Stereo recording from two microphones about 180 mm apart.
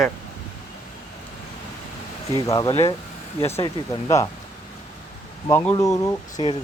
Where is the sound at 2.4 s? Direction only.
15° left (ahead or behind).